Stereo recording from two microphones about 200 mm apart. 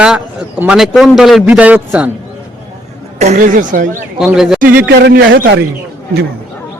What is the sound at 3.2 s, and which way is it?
Speech, 40° right (ahead or behind).